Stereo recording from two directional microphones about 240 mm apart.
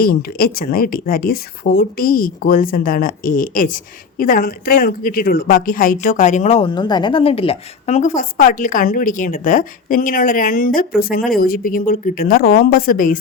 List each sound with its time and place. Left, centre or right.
0.0 s a woman's voice: left